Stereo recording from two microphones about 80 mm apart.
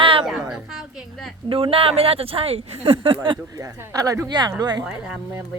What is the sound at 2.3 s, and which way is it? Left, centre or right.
Speech, right.